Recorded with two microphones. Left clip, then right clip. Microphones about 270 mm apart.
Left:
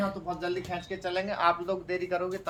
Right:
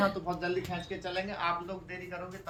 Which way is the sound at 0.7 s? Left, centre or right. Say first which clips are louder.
Left 4 dB; centre.